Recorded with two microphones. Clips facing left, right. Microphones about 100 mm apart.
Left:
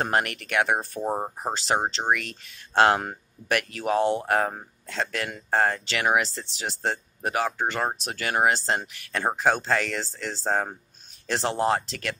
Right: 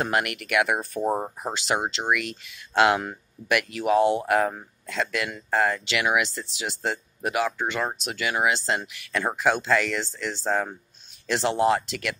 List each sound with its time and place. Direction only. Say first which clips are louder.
0.0 s speech: even; 35° left (ahead or behind)